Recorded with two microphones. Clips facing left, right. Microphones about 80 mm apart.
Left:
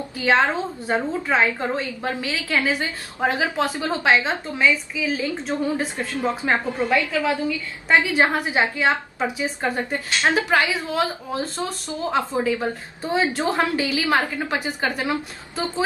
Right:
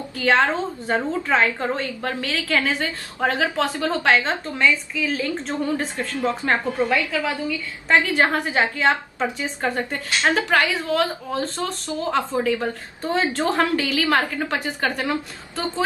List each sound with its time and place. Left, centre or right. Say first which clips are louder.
0.2 s a woman's voice: even; centre